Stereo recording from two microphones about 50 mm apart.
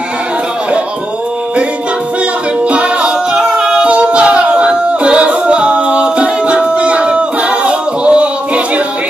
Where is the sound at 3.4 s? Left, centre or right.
Centre.